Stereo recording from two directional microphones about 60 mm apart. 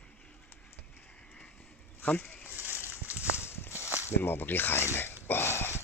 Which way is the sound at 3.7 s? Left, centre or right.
Right.